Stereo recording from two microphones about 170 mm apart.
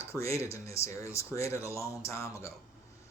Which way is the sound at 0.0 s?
15° left (ahead or behind).